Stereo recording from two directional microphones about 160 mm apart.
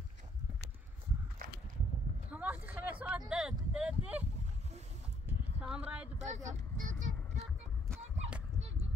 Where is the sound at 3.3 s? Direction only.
5° right (ahead or behind).